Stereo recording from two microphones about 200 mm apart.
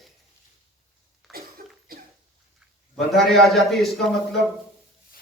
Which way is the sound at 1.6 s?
45° right (ahead or behind).